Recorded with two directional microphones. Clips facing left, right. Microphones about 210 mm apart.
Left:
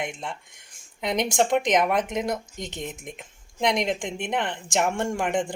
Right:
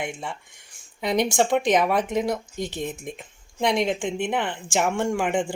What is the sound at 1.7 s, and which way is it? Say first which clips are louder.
Speech: right 2 dB; 5° right (ahead or behind).